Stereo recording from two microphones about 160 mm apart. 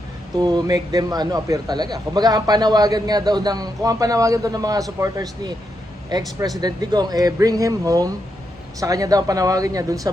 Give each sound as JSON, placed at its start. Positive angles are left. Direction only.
{"t": 0.3, "sound": "speech", "side_deg": -25}